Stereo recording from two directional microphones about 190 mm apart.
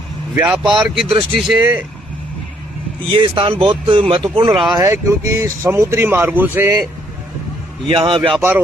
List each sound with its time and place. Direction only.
0.3 s speech: 5° right (ahead or behind)
3.1 s speech: 25° right (ahead or behind)
4.5 s speech: centre (ahead or behind)
4.8 s speech: 15° right (ahead or behind)
7.9 s speech: 25° right (ahead or behind)
8.4 s speech: 10° right (ahead or behind)